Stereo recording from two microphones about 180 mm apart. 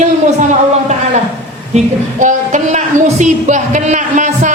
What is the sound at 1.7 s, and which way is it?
A woman's voice, 45° right (ahead or behind).